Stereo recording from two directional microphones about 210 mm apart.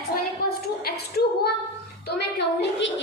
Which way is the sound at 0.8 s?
50° left (ahead or behind).